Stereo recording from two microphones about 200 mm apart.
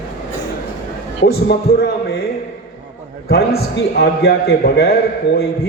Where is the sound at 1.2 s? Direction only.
50° left (ahead or behind).